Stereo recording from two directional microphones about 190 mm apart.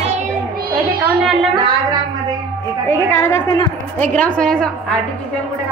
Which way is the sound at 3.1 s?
15° left (ahead or behind).